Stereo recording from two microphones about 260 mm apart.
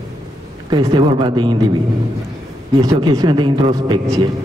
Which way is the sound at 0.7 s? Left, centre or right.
Centre.